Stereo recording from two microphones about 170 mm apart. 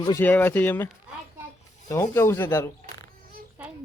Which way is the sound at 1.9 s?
15° left (ahead or behind).